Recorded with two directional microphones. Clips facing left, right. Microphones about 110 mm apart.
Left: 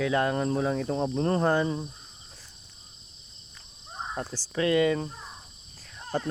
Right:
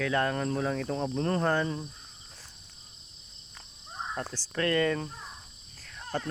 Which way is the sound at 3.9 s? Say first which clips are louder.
Left 1 dB; 15° left (ahead or behind).